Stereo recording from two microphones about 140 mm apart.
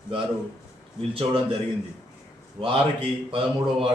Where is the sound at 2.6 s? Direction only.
40° right (ahead or behind).